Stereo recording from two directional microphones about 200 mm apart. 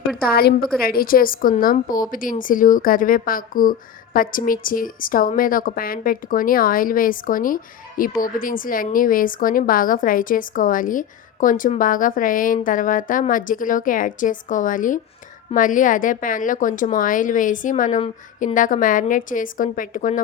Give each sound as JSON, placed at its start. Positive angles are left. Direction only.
{"t": 0.2, "sound": "a woman's voice", "side_deg": 50}